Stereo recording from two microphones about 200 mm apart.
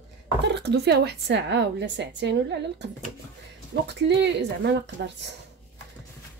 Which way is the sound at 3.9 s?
60° right (ahead or behind).